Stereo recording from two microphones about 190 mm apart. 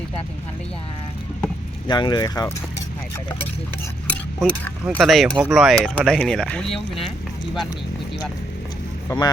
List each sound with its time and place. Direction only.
1.9 s speech: 20° left (ahead or behind)
4.0 s speech: 5° left (ahead or behind)
9.0 s speech: 20° left (ahead or behind)